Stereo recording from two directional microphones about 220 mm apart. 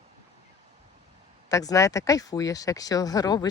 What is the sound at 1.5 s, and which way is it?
Speech, 15° left (ahead or behind).